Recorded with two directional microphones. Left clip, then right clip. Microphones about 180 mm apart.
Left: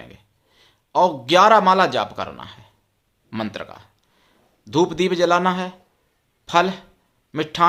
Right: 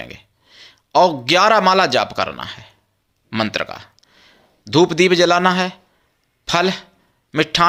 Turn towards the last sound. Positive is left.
turn(degrees=-15)  # may be behind; listen again after turning